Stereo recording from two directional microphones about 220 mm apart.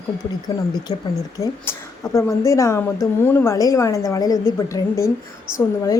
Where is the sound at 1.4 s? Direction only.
15° left (ahead or behind).